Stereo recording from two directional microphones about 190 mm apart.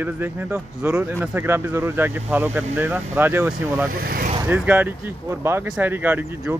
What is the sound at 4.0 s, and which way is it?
Speech, 50° right (ahead or behind).